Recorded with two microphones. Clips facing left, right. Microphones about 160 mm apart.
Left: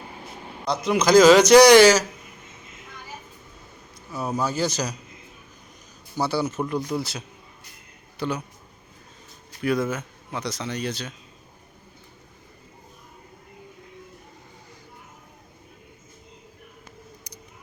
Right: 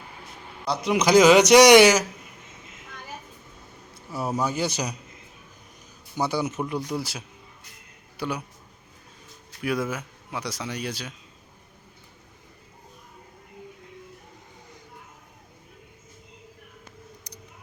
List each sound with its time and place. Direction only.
0.6 s speech: 10° right (ahead or behind)
3.9 s a sound: 25° right (ahead or behind)
4.4 s speech: 15° right (ahead or behind)
6.1 s speech: 15° right (ahead or behind)
9.5 s speech: 5° right (ahead or behind)
17.3 s a sound: 10° left (ahead or behind)